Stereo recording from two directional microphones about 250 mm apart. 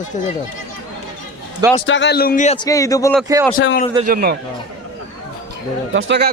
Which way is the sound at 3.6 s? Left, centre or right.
Left.